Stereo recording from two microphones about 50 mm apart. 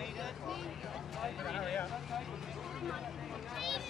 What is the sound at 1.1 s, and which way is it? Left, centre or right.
Vehicle, centre.